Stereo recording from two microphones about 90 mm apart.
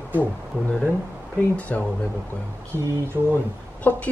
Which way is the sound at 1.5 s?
15° left (ahead or behind).